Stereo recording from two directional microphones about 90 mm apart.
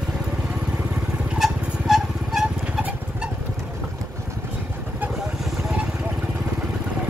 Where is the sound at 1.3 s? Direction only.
5° right (ahead or behind).